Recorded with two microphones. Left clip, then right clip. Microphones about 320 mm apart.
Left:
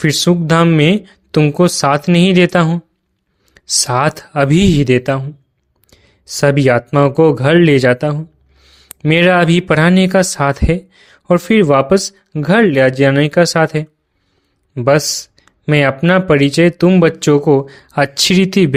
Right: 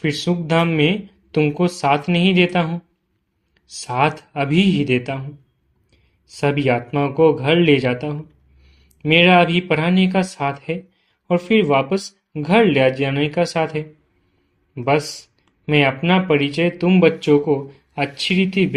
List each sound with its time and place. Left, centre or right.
0.0 s speech: left
11.3 s a man's voice: left
11.6 s speech: left